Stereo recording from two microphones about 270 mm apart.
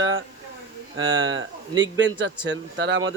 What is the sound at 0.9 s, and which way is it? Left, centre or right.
A man's voice, right.